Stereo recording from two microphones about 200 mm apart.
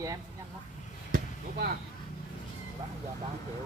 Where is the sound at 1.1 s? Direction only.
50° right (ahead or behind).